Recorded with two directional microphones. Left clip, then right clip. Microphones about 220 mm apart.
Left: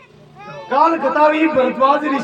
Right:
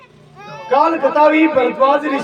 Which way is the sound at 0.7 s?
15° left (ahead or behind).